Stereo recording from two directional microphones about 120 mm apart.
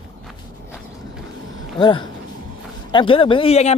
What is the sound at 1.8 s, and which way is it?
Speech, 40° left (ahead or behind).